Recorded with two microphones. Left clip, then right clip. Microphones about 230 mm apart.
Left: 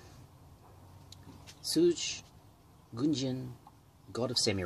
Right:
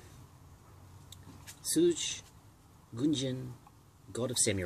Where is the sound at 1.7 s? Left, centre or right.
Left.